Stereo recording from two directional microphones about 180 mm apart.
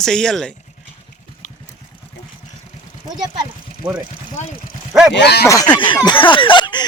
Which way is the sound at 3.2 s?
20° right (ahead or behind).